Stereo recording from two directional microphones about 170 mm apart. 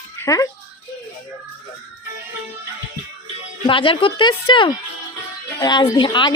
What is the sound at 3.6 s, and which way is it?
A woman's voice, 30° left (ahead or behind).